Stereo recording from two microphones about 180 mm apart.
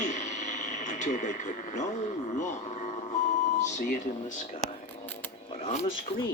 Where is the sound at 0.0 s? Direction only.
40° left (ahead or behind).